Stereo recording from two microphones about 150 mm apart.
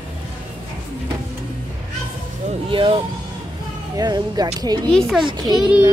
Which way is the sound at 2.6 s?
35° right (ahead or behind).